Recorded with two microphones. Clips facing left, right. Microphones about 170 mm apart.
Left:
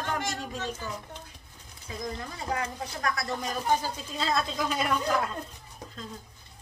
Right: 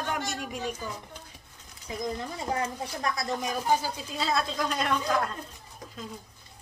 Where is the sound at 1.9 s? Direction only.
20° right (ahead or behind); by 5.3 s 5° left (ahead or behind).